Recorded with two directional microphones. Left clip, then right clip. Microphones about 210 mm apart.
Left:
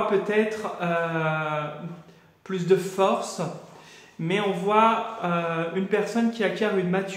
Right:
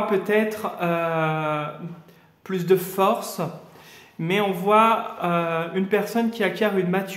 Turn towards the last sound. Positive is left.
turn(degrees=-40)  # may be behind; listen again after turning